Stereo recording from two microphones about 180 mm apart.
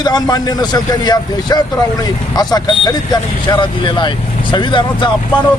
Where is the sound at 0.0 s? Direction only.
20° left (ahead or behind).